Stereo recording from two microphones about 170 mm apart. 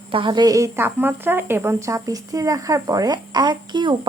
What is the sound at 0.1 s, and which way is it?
Speech, 30° right (ahead or behind).